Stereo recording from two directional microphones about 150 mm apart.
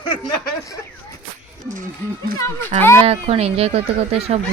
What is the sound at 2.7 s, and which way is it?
Speech, 60° right (ahead or behind).